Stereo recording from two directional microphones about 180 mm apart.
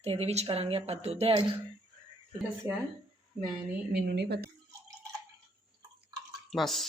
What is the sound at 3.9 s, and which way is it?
Speech, 65° right (ahead or behind).